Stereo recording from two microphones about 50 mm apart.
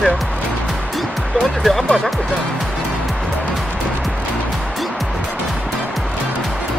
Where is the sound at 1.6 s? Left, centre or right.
Centre.